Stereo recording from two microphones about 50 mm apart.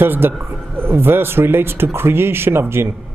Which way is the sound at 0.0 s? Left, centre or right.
Right.